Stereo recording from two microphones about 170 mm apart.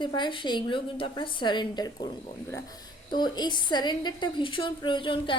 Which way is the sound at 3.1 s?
25° left (ahead or behind).